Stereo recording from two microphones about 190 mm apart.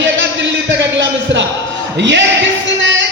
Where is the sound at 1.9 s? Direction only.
70° right (ahead or behind).